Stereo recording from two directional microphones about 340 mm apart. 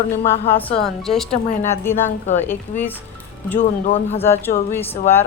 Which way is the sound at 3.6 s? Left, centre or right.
Centre.